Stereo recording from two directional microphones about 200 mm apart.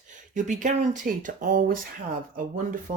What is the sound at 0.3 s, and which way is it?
A woman's voice, 35° right (ahead or behind).